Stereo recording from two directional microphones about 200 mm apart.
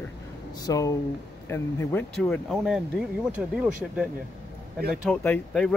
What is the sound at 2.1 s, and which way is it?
Speech, centre (ahead or behind).